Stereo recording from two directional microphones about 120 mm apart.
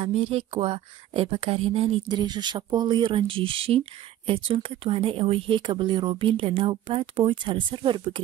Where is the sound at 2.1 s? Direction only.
40° right (ahead or behind).